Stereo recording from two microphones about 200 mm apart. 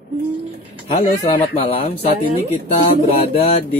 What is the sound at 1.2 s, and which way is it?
Speech, 30° left (ahead or behind).